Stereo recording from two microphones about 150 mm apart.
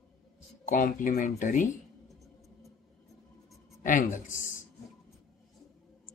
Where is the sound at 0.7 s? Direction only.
65° left (ahead or behind).